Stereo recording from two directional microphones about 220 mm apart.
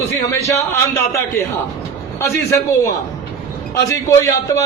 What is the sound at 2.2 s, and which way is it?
Speech, 15° left (ahead or behind).